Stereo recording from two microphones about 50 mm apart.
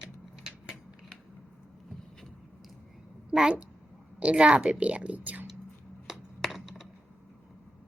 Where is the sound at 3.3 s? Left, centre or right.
Right.